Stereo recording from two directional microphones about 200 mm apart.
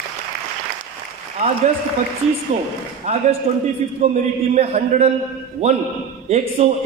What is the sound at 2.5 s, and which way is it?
A man's voice, 30° right (ahead or behind).